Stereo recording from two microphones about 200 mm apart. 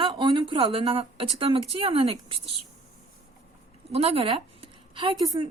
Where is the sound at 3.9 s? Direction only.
30° right (ahead or behind).